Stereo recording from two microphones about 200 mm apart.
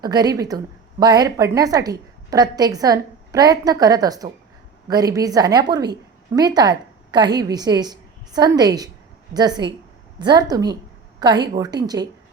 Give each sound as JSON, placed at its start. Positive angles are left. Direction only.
{"t": 0.0, "sound": "a woman's voice", "side_deg": -20}